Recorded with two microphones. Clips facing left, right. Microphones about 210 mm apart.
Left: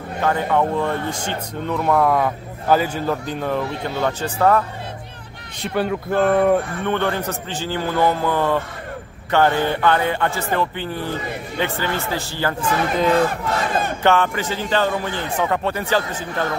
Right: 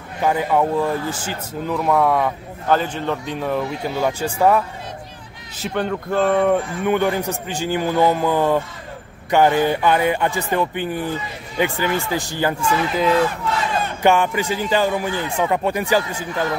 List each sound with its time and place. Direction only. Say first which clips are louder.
0.2 s speech: right 1 dB; 10° right (ahead or behind)
5.6 s speech: left 1 dB; 5° left (ahead or behind)
6.8 s a man's voice: right 3 dB; 10° right (ahead or behind)
13.2 s crowd: even; 50° left (ahead or behind)
14.0 s a man's voice: right 2 dB; 15° right (ahead or behind)